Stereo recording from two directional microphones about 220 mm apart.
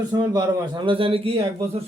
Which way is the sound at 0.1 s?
20° right (ahead or behind).